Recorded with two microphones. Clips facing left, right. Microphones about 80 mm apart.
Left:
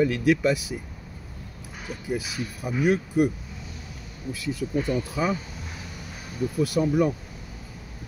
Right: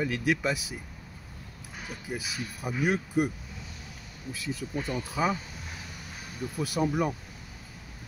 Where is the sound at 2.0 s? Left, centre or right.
Centre.